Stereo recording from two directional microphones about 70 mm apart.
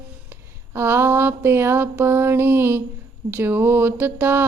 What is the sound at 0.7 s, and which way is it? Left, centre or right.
Mantra, right.